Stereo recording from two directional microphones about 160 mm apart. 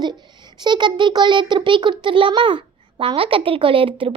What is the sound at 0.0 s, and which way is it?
A child's voice, 25° right (ahead or behind).